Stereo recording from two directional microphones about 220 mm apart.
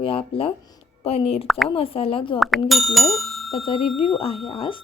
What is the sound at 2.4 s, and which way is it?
A woman's voice, centre (ahead or behind).